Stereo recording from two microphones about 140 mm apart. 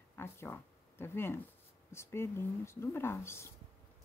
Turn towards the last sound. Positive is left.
turn(degrees=20)  # may be behind; listen again after turning